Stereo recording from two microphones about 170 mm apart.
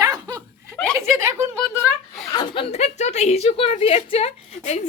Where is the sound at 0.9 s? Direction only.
15° right (ahead or behind).